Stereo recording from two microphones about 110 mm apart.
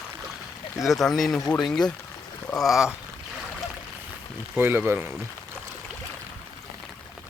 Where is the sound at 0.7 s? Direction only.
Centre (ahead or behind).